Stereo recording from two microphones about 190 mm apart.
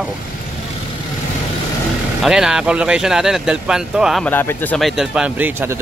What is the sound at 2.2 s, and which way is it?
Speech, 5° right (ahead or behind).